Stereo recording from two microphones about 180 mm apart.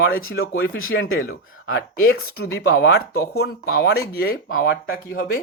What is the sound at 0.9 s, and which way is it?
Speech, 70° left (ahead or behind).